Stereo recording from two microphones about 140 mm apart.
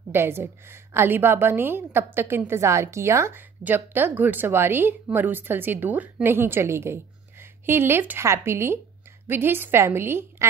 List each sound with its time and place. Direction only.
0.1 s a woman's voice: 15° right (ahead or behind)